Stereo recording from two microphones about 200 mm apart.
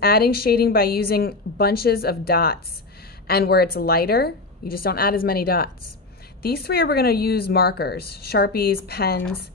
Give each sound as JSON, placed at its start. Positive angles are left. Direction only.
{"t": 0.0, "sound": "a woman's voice", "side_deg": 50}